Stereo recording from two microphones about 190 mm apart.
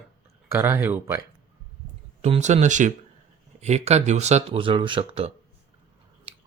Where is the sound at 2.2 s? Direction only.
35° right (ahead or behind).